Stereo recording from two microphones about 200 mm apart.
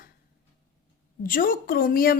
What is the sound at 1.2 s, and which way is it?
Speech, 45° left (ahead or behind).